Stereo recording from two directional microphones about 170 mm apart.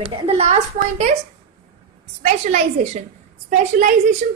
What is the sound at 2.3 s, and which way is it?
A woman's voice, 40° right (ahead or behind).